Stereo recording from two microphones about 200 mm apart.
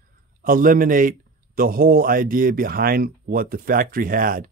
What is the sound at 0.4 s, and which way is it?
Speech, 45° right (ahead or behind).